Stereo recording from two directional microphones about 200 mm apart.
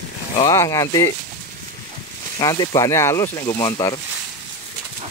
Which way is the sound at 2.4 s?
20° left (ahead or behind).